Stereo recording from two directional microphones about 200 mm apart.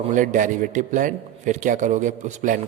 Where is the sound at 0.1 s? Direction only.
40° right (ahead or behind).